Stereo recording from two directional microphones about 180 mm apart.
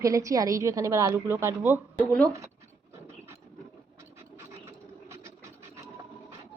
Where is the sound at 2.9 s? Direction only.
15° right (ahead or behind).